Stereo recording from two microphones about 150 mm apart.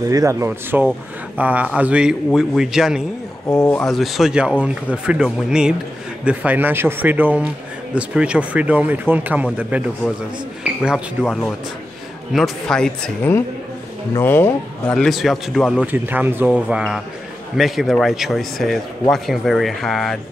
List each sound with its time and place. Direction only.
0.1 s speech: 20° right (ahead or behind); by 3.0 s 5° right (ahead or behind)
3.4 s speech: 20° left (ahead or behind)
3.8 s a man's voice: centre (ahead or behind)
10.6 s a sound: 5° right (ahead or behind)
12.4 s a man's voice: 5° left (ahead or behind)